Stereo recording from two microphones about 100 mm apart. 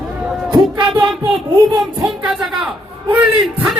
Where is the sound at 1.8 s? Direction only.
5° right (ahead or behind).